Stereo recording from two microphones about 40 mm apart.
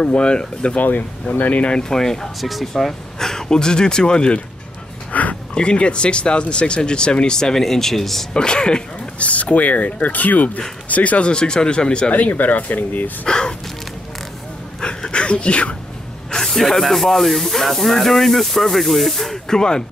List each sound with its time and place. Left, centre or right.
0.0 s speech: left
0.7 s speech: left
1.8 s speech: centre
2.4 s speech: centre
2.7 s speech: centre
8.3 s speech: centre
9.3 s speech: left
12.1 s speech: left
13.2 s speech: centre
14.8 s a sound: left
16.3 s speech: centre
19.4 s speech: centre